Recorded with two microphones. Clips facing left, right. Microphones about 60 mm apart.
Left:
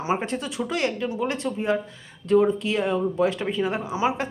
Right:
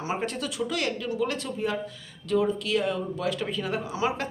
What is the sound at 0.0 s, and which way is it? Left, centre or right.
Speech, left.